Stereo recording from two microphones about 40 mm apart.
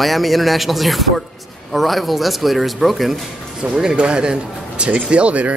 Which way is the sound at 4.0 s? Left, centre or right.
Right.